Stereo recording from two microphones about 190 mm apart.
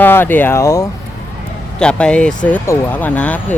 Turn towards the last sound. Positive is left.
turn(degrees=10)  # may be behind; listen again after turning